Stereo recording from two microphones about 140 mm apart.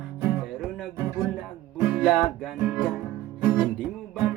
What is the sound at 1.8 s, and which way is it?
Music, 5° right (ahead or behind).